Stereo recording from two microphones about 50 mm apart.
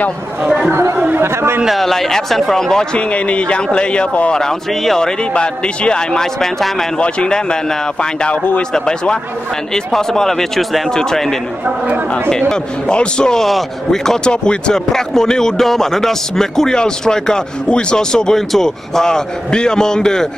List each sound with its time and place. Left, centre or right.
0.4 s speech: centre
1.1 s speech: right
1.7 s speech: centre; by 4.3 s left
4.3 s a man's voice: centre